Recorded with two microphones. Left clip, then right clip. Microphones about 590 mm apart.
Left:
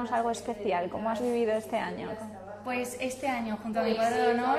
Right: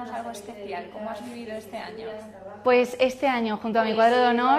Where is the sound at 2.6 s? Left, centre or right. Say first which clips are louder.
Right 13 dB; right.